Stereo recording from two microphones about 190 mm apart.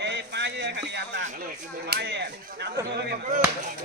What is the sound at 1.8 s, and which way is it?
Speech, 60° right (ahead or behind).